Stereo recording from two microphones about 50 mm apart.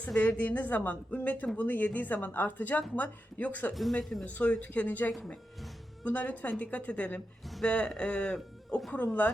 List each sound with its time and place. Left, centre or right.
0.2 s a woman's voice: left
8.9 s a woman's voice: left